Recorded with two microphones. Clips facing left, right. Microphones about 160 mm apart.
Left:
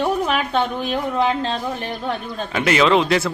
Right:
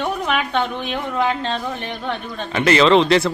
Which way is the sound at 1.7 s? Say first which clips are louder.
Left 1 dB; 40° left (ahead or behind).